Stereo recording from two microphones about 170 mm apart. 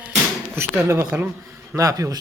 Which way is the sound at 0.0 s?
10° right (ahead or behind).